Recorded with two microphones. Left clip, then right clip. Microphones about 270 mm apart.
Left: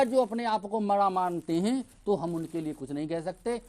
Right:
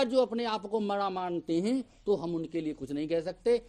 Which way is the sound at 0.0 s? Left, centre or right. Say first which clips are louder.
Left 2 dB; left.